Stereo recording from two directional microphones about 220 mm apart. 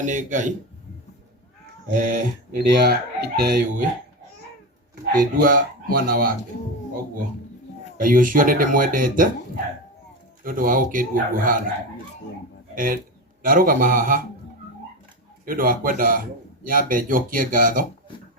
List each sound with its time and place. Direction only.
0.0 s speech: 35° right (ahead or behind)
2.0 s speech: 40° right (ahead or behind)
5.4 s speech: 40° right (ahead or behind)
7.9 s speech: 40° right (ahead or behind)
10.4 s speech: 40° right (ahead or behind)
12.7 s speech: 40° right (ahead or behind)
15.4 s speech: 40° right (ahead or behind)